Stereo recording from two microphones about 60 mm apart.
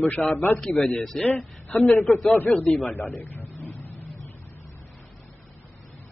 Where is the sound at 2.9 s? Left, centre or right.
Left.